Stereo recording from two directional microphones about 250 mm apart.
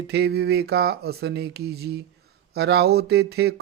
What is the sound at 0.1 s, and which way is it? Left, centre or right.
Speech, right.